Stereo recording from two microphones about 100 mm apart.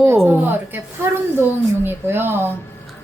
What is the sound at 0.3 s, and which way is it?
A woman's voice, 20° right (ahead or behind).